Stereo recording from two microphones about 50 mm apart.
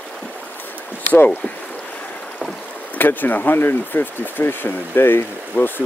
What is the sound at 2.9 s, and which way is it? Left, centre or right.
Speech, left.